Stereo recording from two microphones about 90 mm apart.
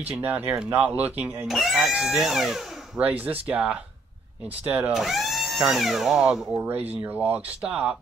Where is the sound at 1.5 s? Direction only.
Centre (ahead or behind).